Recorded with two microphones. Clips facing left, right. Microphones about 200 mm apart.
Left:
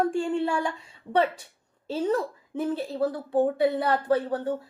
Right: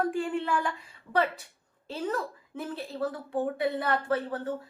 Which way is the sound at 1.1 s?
45° left (ahead or behind).